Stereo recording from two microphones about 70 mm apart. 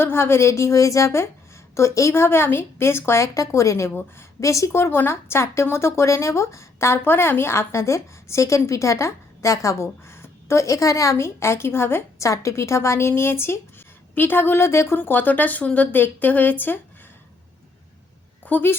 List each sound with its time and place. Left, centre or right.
0.0 s a woman's voice: left
12.3 s speech: left
14.9 s a woman's voice: left
18.4 s a woman's voice: left